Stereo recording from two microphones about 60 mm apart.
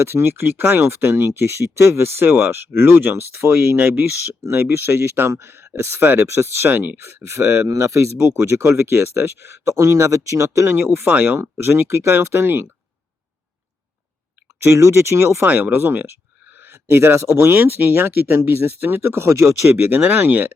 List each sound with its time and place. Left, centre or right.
0.0 s speech: right
10.8 s speech: right
11.0 s speech: right
11.3 s speech: right
14.6 s speech: right
15.4 s speech: right
17.5 s speech: right
19.7 s speech: right